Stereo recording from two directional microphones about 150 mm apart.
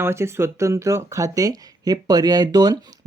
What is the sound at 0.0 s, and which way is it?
Speech, 15° right (ahead or behind).